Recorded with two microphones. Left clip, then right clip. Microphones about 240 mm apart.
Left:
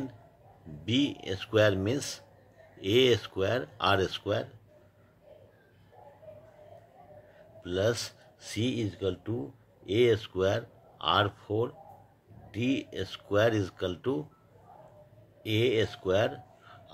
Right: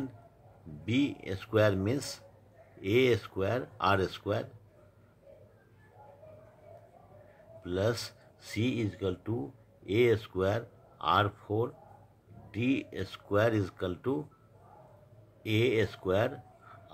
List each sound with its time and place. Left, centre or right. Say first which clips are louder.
0.8 s speech: left 2 dB; centre
7.6 s speech: left 3 dB; centre
15.4 s speech: left 1 dB; centre